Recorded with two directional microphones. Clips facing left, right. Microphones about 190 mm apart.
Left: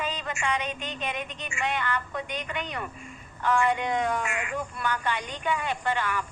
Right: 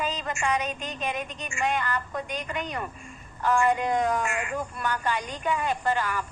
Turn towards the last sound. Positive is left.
turn(degrees=-40)  # may be behind; listen again after turning